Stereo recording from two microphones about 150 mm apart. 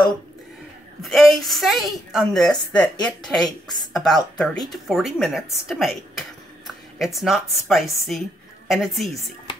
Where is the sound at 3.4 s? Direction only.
25° left (ahead or behind).